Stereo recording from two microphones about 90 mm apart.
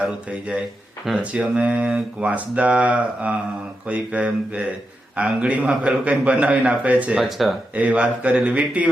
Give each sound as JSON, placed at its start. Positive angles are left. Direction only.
{"t": 0.3, "sound": "speech", "side_deg": -10}
{"t": 7.2, "sound": "speech", "side_deg": 0}
{"t": 7.8, "sound": "speech", "side_deg": -15}